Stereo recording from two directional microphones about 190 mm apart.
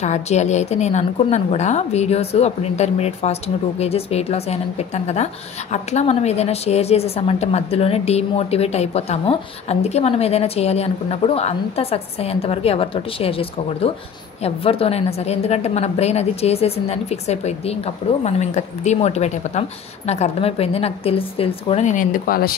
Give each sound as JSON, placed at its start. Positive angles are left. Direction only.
{"t": 0.0, "sound": "a woman's voice", "side_deg": 35}